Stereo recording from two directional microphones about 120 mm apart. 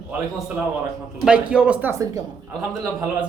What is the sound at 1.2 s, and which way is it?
Speech, 10° right (ahead or behind).